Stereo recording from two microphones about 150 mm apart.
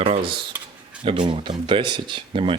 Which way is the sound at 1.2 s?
30° right (ahead or behind).